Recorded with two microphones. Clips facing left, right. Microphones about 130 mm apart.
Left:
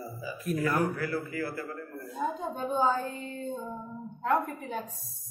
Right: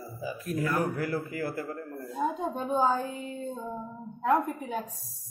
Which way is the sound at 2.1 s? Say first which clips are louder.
Right 2 dB; centre (ahead or behind).